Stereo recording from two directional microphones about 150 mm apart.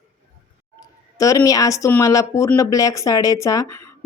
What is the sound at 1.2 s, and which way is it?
Speech, 20° left (ahead or behind).